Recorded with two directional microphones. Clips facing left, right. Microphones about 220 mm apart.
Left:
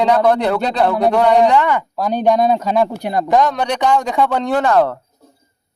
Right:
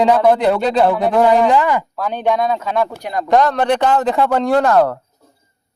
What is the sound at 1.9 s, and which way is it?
Speech, 40° left (ahead or behind).